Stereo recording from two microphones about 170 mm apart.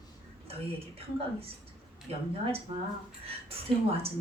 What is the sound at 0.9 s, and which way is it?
Speech, 35° right (ahead or behind).